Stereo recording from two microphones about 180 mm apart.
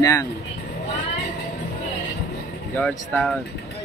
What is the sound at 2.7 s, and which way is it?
Speech, 5° left (ahead or behind).